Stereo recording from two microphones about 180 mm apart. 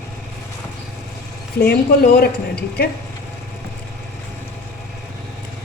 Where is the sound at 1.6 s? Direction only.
60° left (ahead or behind).